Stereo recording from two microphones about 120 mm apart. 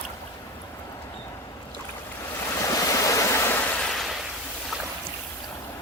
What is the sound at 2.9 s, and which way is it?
Waterfall, 25° left (ahead or behind).